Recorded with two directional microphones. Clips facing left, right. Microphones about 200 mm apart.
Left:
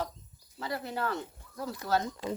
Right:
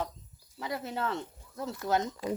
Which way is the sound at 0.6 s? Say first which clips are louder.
Even; 20° right (ahead or behind).